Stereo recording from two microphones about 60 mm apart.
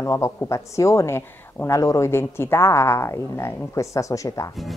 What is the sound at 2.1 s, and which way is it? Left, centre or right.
A woman's voice, left.